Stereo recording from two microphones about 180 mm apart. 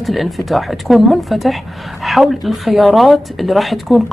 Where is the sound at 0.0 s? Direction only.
Centre (ahead or behind).